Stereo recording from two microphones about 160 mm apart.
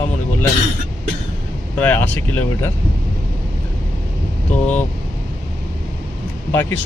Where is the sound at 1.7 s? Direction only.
10° left (ahead or behind).